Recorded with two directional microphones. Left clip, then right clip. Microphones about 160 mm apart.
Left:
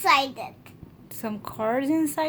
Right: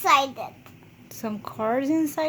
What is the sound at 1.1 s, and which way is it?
Child singing, 10° right (ahead or behind).